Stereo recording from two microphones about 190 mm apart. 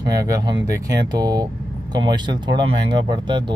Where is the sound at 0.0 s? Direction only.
20° right (ahead or behind).